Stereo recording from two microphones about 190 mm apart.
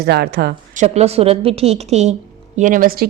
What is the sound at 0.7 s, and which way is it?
A woman's voice, 35° right (ahead or behind).